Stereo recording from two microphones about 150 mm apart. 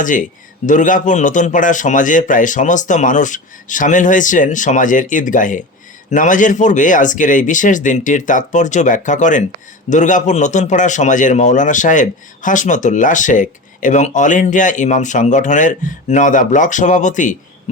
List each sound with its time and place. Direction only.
0.0 s a man's voice: 60° left (ahead or behind)